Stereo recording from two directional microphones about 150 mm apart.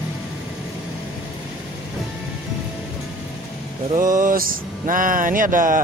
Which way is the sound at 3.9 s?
60° right (ahead or behind).